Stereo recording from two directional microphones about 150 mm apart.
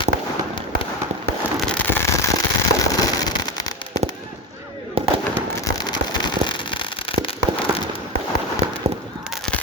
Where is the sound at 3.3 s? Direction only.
25° left (ahead or behind).